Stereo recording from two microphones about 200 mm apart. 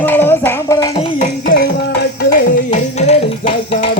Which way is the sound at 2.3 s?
45° left (ahead or behind).